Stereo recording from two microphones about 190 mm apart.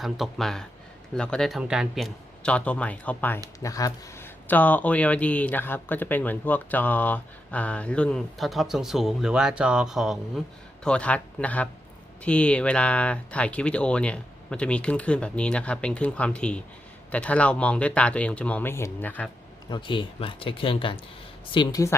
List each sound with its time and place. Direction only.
0.0 s speech: centre (ahead or behind)
19.7 s speech: 25° left (ahead or behind)